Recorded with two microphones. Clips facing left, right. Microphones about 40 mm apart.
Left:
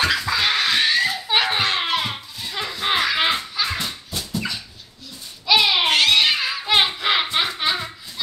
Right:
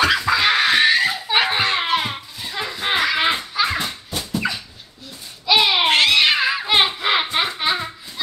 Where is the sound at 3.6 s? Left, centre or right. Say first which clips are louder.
Right 4 dB; centre.